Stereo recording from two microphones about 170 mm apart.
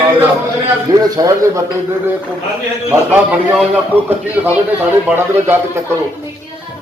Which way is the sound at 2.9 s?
10° right (ahead or behind).